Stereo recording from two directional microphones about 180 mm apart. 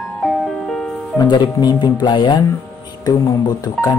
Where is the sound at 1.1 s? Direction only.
25° left (ahead or behind).